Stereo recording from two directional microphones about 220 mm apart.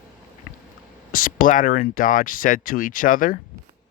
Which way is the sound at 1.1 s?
40° left (ahead or behind).